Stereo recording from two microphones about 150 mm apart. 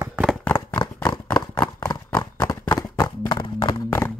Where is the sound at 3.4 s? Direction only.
25° left (ahead or behind).